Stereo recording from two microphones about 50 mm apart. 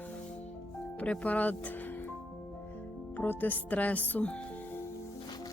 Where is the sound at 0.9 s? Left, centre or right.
Left.